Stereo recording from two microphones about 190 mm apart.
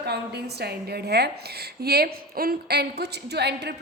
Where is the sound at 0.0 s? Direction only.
60° right (ahead or behind).